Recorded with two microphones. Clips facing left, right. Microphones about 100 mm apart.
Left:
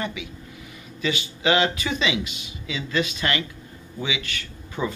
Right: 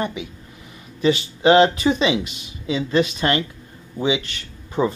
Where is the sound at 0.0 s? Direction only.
40° right (ahead or behind).